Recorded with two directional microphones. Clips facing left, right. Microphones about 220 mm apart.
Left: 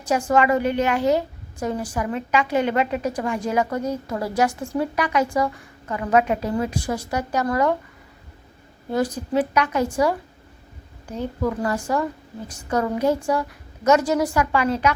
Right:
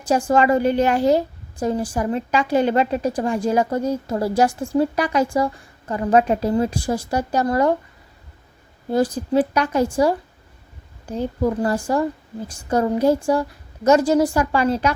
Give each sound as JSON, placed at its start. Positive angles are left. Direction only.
{"t": 0.0, "sound": "a woman's voice", "side_deg": -30}
{"t": 8.9, "sound": "a woman's voice", "side_deg": -30}
{"t": 11.2, "sound": "a woman's voice", "side_deg": -35}